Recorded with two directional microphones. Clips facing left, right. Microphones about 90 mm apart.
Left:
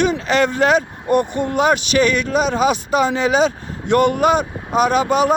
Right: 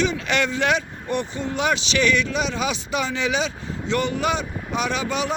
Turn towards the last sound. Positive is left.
turn(degrees=45)  # may be behind; listen again after turning